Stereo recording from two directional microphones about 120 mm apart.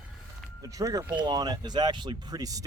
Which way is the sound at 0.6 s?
30° right (ahead or behind).